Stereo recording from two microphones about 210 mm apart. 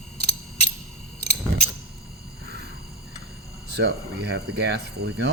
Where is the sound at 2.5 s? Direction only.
50° right (ahead or behind).